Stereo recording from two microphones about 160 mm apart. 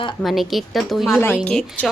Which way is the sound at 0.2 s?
Centre (ahead or behind).